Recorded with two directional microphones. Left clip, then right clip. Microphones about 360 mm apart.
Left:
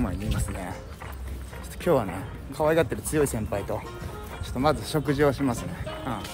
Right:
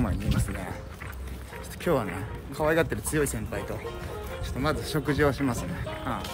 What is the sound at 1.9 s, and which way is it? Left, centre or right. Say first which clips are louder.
Speech: left 3 dB; centre.